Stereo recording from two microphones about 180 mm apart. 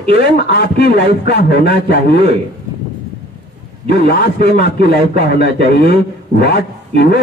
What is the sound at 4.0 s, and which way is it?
A man's voice, 65° left (ahead or behind).